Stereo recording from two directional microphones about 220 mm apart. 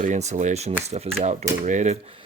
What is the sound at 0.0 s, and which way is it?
Speech, 30° right (ahead or behind).